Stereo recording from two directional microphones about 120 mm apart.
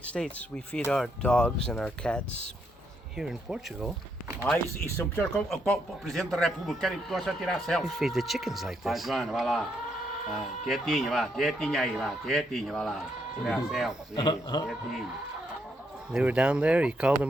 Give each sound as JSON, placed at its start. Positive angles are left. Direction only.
{"t": 0.1, "sound": "speech", "side_deg": 10}
{"t": 3.2, "sound": "a man's voice", "side_deg": -5}
{"t": 4.5, "sound": "speech", "side_deg": 20}
{"t": 5.5, "sound": "a man's voice", "side_deg": 5}
{"t": 14.2, "sound": "speech", "side_deg": 35}
{"t": 14.7, "sound": "a man's voice", "side_deg": 0}
{"t": 16.1, "sound": "speech", "side_deg": -10}